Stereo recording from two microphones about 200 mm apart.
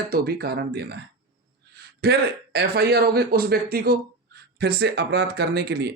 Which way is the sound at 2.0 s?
55° right (ahead or behind).